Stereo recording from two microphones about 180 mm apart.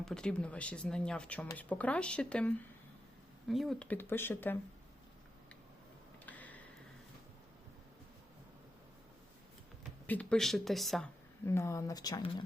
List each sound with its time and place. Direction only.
0.0 s speech: 5° left (ahead or behind)
6.2 s tick-tock: 10° left (ahead or behind)
10.1 s speech: 5° left (ahead or behind)
11.4 s speech: 15° left (ahead or behind)